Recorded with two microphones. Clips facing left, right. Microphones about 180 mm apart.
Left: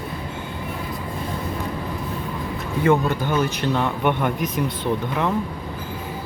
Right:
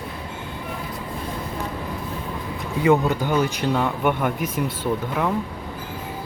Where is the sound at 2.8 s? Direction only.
10° right (ahead or behind).